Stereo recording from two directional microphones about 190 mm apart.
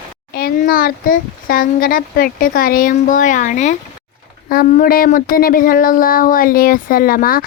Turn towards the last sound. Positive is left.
turn(degrees=50)  # may be behind; listen again after turning